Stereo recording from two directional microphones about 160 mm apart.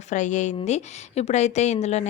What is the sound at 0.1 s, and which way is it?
A woman's voice, 50° left (ahead or behind).